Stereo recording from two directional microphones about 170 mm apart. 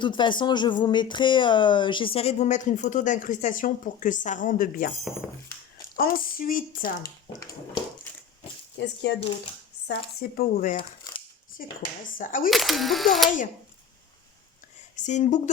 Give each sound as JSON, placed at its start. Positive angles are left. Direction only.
{"t": 0.0, "sound": "speech", "side_deg": 25}
{"t": 6.0, "sound": "speech", "side_deg": 55}
{"t": 9.8, "sound": "speech", "side_deg": 70}
{"t": 10.8, "sound": "a sound", "side_deg": 30}
{"t": 11.6, "sound": "speech", "side_deg": 50}
{"t": 12.5, "sound": "speech", "side_deg": 0}
{"t": 14.9, "sound": "speech", "side_deg": 45}